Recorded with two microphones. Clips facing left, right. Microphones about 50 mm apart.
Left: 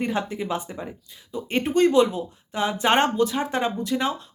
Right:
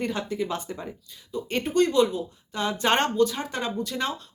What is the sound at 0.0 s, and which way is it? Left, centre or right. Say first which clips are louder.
Speech: left 2 dB; left.